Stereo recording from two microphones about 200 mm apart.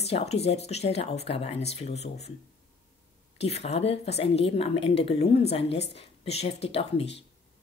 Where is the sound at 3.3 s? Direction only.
30° left (ahead or behind).